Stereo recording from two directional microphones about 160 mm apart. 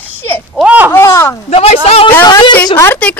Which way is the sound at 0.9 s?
15° left (ahead or behind).